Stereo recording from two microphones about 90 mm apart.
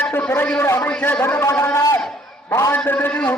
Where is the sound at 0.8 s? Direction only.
15° left (ahead or behind).